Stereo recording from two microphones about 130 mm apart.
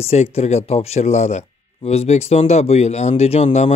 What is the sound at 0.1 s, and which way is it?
Speech, 55° left (ahead or behind).